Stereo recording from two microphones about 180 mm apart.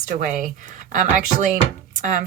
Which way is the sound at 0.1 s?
45° right (ahead or behind).